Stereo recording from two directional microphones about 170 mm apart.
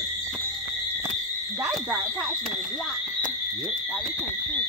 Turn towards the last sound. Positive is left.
turn(degrees=5)  # may be behind; listen again after turning